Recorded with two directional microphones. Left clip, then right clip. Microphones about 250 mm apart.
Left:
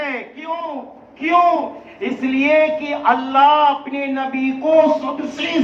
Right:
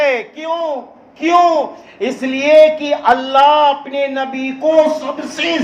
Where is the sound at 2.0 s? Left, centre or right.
Right.